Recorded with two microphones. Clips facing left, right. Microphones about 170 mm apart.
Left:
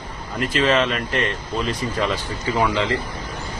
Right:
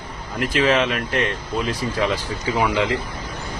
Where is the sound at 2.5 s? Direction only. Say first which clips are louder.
Even; 10° right (ahead or behind).